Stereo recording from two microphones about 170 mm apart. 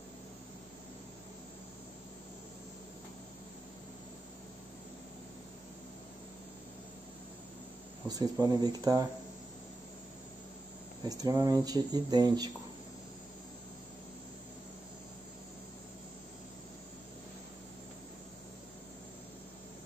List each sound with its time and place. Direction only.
8.1 s speech: 20° right (ahead or behind)
11.1 s speech: 20° right (ahead or behind)